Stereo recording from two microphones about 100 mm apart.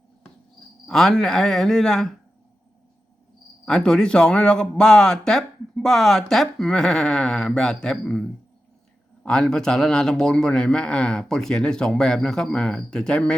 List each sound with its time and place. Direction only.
0.9 s speech: 5° left (ahead or behind)
3.7 s a man's voice: 5° left (ahead or behind)